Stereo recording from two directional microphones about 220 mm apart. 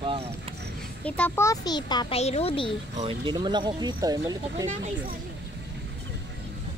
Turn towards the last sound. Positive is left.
turn(degrees=-30)  # may be behind; listen again after turning